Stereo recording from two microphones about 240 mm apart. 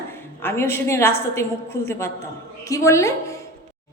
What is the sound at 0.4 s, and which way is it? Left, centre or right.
A woman's voice, centre.